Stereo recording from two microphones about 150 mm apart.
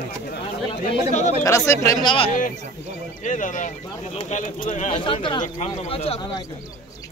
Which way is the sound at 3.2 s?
60° left (ahead or behind).